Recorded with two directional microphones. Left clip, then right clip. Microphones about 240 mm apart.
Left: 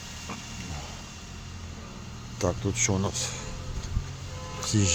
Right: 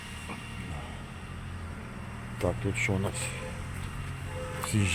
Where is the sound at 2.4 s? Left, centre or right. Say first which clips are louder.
Left 2 dB; left.